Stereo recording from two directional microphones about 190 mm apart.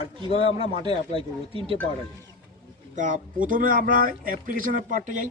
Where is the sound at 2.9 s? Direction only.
40° right (ahead or behind).